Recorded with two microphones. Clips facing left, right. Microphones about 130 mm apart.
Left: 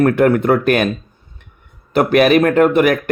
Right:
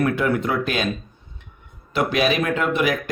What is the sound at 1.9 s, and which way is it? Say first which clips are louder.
Speech: left 9 dB; 55° left (ahead or behind).